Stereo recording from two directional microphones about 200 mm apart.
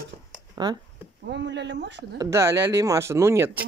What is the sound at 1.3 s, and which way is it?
Speech, 60° right (ahead or behind).